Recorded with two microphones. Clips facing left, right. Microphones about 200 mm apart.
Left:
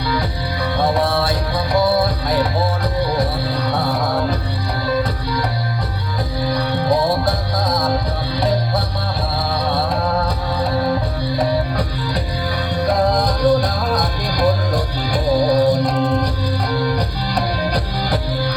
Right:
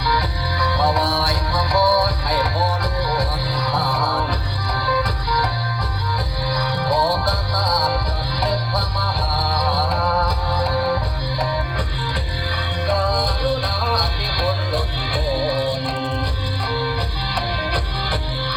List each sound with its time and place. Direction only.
0.1 s music: 25° left (ahead or behind)
6.5 s music: 25° left (ahead or behind)
11.3 s music: 40° left (ahead or behind)